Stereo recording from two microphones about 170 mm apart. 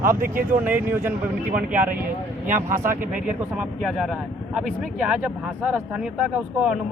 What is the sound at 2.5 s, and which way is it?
Speech, 50° right (ahead or behind).